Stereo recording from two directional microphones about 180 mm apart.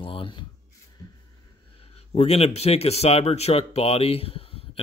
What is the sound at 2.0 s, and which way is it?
Speech, 35° left (ahead or behind).